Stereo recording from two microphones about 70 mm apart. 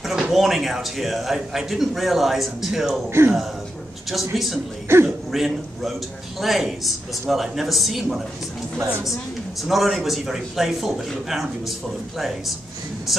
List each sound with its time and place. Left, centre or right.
0.0 s speech: centre
3.1 s speech: right
4.1 s speech: centre
4.9 s speech: right
5.3 s speech: centre
9.6 s speech: centre
13.1 s speech: centre